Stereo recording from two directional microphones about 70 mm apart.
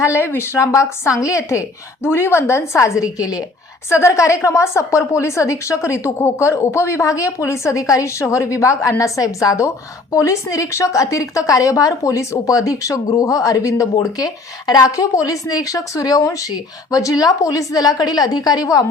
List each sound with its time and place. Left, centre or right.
0.0 s a woman's voice: left
3.0 s a woman's voice: left
3.8 s a woman's voice: left
14.0 s a woman's voice: left